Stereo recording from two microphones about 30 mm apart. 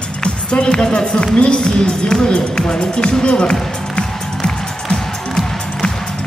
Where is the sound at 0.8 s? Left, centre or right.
Left.